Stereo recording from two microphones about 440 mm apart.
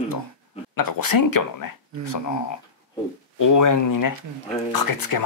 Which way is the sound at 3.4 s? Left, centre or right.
Left.